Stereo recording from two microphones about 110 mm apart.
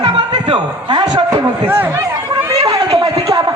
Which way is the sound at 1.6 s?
20° right (ahead or behind).